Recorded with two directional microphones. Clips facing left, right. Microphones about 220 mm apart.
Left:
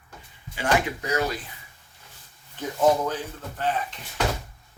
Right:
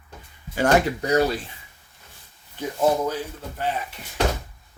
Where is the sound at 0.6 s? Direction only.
45° right (ahead or behind).